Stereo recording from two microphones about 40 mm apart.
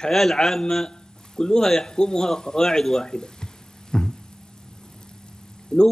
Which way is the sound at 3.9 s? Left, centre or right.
Centre.